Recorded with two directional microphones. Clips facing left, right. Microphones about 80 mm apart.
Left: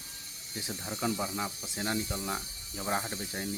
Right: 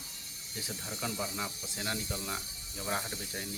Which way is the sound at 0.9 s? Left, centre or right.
Left.